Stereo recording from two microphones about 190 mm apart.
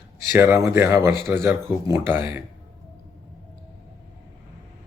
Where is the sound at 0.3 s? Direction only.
15° right (ahead or behind).